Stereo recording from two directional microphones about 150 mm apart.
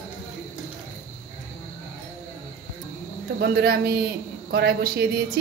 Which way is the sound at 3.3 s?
90° right.